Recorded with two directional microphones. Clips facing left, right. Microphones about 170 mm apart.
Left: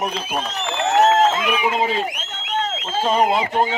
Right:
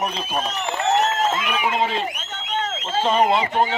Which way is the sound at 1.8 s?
10° left (ahead or behind).